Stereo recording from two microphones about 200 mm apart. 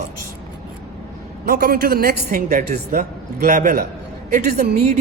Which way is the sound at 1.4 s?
50° right (ahead or behind).